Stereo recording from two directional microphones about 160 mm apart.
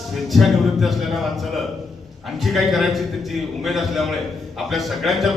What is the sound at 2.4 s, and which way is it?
Speech, centre (ahead or behind).